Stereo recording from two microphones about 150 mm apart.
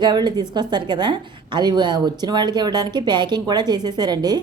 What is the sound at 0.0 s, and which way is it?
A woman's voice, 30° right (ahead or behind).